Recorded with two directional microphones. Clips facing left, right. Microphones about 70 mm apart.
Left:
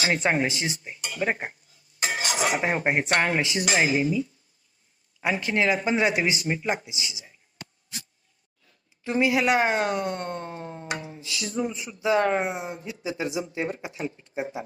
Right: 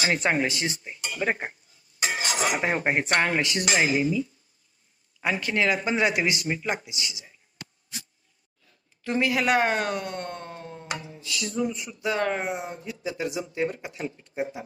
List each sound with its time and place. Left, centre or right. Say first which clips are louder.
0.2 s speech: even; centre
1.1 s speech: even; centre
2.3 s cutlery: left 2 dB; centre
2.6 s speech: left 1 dB; centre
3.7 s speech: even; centre
9.0 s speech: left 2 dB; centre
10.8 s music: left 1 dB; left
11.2 s speech: right 2 dB; left